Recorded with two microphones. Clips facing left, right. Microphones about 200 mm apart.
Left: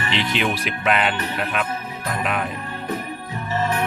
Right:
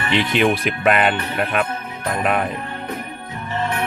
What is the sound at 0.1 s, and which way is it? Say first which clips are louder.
Speech: right 6 dB; 50° right (ahead or behind).